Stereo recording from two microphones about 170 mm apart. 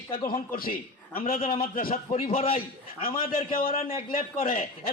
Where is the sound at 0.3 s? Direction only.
55° left (ahead or behind).